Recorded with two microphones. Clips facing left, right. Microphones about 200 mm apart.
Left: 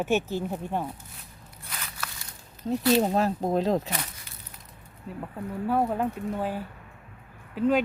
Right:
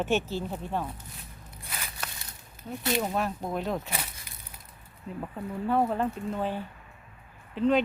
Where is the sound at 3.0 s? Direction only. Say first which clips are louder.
Left 6 dB; 30° left (ahead or behind).